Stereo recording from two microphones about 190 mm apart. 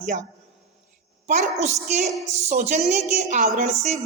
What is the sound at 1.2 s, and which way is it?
A woman's voice, 40° right (ahead or behind).